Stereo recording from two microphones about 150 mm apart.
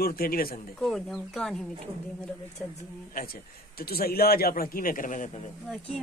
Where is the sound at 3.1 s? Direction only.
75° left (ahead or behind); by 5.4 s 60° left (ahead or behind).